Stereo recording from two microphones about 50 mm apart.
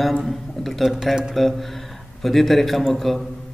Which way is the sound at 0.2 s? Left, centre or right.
Centre.